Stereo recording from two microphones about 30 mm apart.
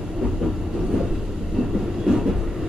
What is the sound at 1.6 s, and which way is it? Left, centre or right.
Train, right.